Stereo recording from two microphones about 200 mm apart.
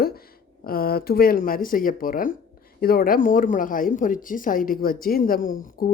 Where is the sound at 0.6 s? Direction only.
50° left (ahead or behind).